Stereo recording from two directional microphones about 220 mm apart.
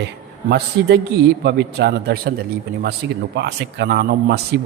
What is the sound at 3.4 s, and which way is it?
A man's voice, 50° right (ahead or behind).